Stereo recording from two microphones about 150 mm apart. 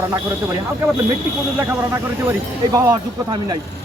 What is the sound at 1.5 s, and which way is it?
A man's voice, 15° right (ahead or behind).